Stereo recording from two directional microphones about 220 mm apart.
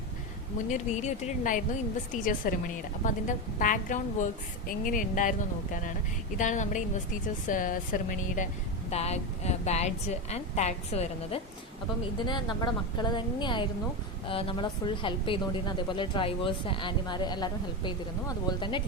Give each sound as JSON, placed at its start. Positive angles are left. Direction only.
{"t": 0.7, "sound": "a woman's voice", "side_deg": 35}
{"t": 6.3, "sound": "a woman's voice", "side_deg": 35}